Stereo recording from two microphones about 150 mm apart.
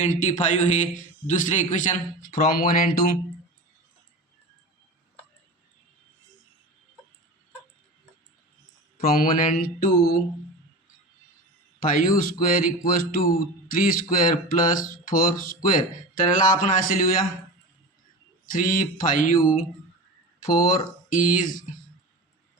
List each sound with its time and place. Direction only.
0.0 s a man's voice: 50° left (ahead or behind); by 2.9 s 75° left (ahead or behind)
9.0 s speech: 75° left (ahead or behind)
11.8 s speech: 65° left (ahead or behind)
18.5 s speech: 65° left (ahead or behind)